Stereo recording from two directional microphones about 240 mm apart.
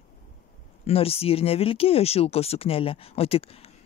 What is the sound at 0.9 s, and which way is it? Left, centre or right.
Speech, left.